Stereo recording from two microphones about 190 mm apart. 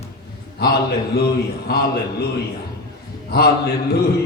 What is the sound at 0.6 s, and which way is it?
A man's voice, 60° left (ahead or behind).